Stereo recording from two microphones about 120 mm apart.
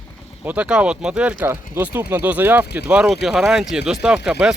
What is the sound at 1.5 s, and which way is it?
Speech, 20° right (ahead or behind).